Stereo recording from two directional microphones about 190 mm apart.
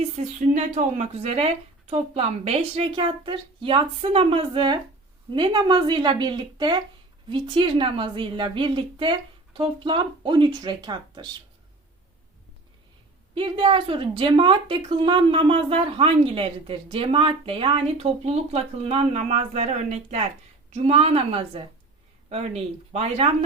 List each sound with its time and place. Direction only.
0.0 s a woman's voice: 40° right (ahead or behind); by 11.3 s 20° right (ahead or behind)
13.3 s a woman's voice: 25° right (ahead or behind)